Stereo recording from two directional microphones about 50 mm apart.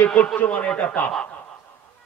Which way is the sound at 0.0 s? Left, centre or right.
Left.